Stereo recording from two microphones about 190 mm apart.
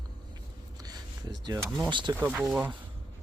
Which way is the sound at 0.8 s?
20° right (ahead or behind).